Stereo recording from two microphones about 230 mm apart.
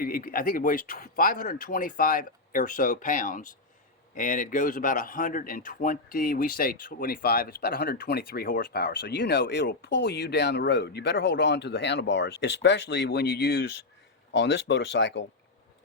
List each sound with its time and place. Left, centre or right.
0.0 s speech: left